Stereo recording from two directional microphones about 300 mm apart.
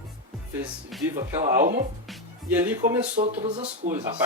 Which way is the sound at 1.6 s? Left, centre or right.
Right.